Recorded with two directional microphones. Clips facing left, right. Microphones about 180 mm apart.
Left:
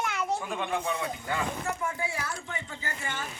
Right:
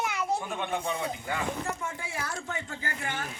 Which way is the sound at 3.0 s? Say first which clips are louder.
Right 1 dB; 60° right (ahead or behind).